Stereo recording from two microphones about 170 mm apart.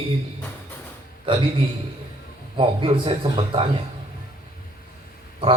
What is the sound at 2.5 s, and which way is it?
A man's voice, 30° right (ahead or behind).